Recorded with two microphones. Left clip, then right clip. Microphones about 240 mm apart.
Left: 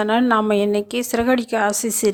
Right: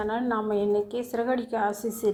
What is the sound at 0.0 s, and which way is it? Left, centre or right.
A woman's voice, left.